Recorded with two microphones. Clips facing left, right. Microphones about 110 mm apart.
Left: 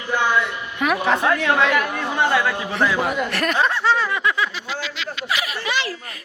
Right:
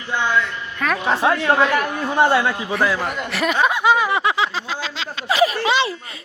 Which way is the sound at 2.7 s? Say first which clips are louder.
Left 2 dB; centre (ahead or behind).